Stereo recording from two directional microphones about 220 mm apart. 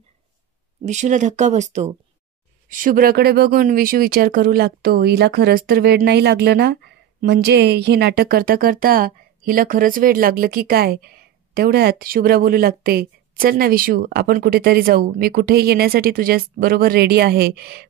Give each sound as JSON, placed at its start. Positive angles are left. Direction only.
{"t": 0.8, "sound": "speech", "side_deg": -35}